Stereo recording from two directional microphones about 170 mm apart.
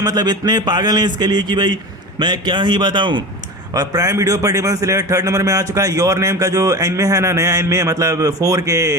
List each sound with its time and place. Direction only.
0.0 s a man's voice: 20° right (ahead or behind)